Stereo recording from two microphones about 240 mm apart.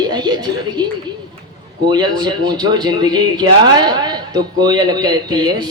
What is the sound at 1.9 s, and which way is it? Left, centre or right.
Speech, centre.